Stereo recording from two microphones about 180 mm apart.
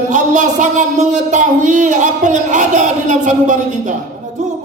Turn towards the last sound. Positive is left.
turn(degrees=-45)  # may be behind; listen again after turning